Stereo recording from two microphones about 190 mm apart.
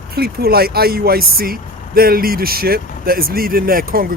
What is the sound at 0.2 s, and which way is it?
Speech, 55° right (ahead or behind).